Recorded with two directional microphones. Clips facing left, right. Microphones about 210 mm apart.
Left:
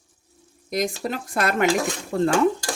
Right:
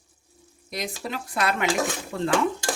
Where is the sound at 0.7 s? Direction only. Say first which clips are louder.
Left 6 dB; 45° left (ahead or behind).